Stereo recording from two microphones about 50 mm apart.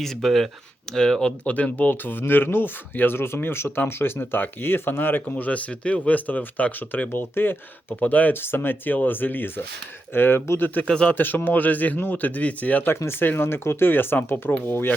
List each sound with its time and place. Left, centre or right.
0.0 s speech: centre
0.9 s speech: centre
1.5 s speech: left
5.5 s speech: left
8.4 s speech: left
10.8 s speech: centre
11.1 s speech: left
13.1 s speech: left